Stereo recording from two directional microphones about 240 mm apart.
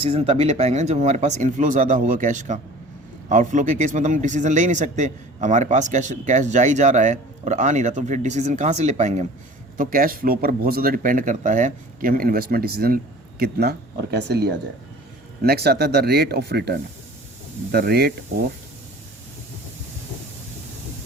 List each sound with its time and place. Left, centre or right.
0.0 s a man's voice: right